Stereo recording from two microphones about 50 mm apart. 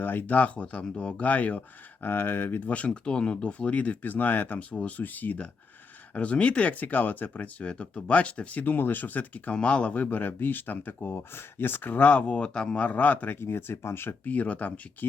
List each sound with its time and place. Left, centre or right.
0.0 s speech: left
2.0 s speech: left
2.6 s speech: left
6.1 s speech: left
9.5 s speech: left
10.8 s speech: left
13.4 s speech: left
14.3 s speech: left